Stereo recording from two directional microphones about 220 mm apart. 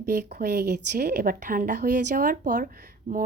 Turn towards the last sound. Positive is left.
turn(degrees=-40)  # may be behind; listen again after turning